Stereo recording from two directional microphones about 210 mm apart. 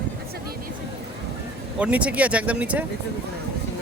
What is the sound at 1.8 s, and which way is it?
Speech, 5° right (ahead or behind).